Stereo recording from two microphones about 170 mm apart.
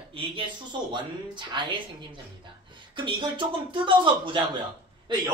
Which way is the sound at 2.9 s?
30° right (ahead or behind).